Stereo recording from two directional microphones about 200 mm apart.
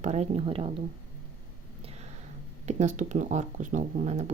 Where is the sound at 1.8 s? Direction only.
30° right (ahead or behind).